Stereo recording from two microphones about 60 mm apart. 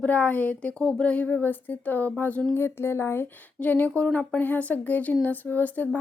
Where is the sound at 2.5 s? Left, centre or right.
Left.